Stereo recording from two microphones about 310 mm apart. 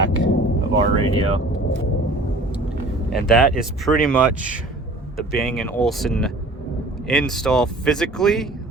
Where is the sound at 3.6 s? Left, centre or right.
Centre.